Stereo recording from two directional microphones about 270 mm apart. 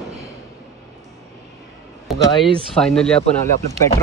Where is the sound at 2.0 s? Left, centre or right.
Centre.